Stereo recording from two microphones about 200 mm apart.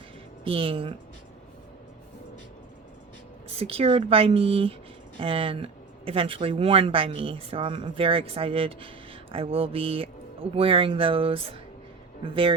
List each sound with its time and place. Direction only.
0.4 s speech: 25° right (ahead or behind)
3.6 s speech: 30° right (ahead or behind)